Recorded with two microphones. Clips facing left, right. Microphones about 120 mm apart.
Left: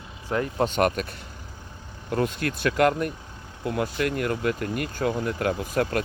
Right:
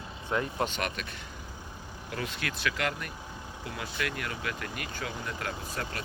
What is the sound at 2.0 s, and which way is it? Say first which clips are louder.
Speech: left 10 dB; 45° left (ahead or behind).